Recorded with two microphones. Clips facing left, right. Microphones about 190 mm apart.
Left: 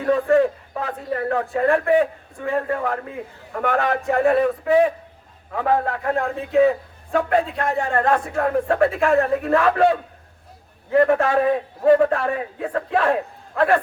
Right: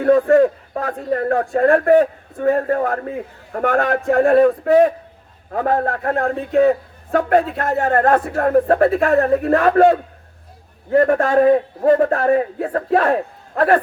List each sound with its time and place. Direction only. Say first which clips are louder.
0.0 s a man's voice: right 5 dB; 45° right (ahead or behind)